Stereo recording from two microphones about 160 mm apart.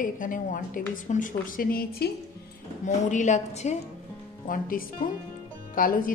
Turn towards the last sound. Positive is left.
turn(degrees=60)  # may be behind; listen again after turning